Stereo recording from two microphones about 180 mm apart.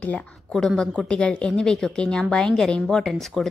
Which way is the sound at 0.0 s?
5° left (ahead or behind).